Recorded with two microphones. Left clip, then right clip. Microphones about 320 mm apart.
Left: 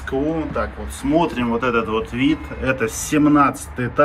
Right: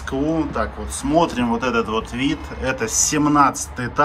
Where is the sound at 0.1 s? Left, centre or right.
Centre.